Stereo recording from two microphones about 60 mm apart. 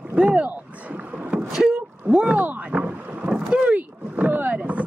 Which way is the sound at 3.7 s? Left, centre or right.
Right.